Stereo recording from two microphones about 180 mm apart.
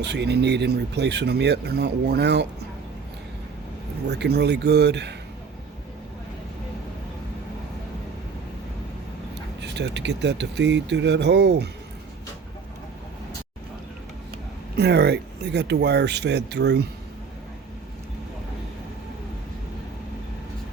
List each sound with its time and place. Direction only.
0.0 s speech: 70° right (ahead or behind)
4.0 s speech: 70° right (ahead or behind)
9.6 s speech: 75° right (ahead or behind)
14.8 s speech: 65° right (ahead or behind)